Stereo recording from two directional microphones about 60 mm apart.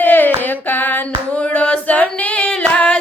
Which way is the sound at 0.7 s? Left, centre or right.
Left.